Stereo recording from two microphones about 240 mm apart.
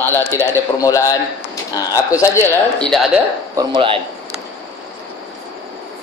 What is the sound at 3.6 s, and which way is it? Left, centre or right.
Speech, right.